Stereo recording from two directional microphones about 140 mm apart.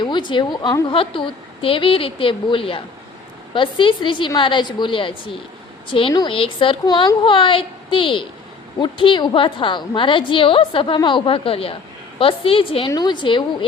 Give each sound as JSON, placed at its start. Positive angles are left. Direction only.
{"t": 0.0, "sound": "a woman's voice", "side_deg": 35}